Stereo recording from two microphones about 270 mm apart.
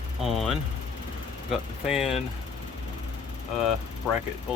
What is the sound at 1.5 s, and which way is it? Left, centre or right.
Speech, centre.